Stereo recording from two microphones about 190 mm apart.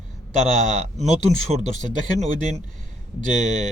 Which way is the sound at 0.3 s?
40° right (ahead or behind).